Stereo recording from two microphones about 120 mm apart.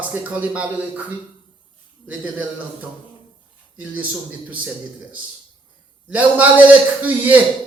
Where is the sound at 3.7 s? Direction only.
15° right (ahead or behind).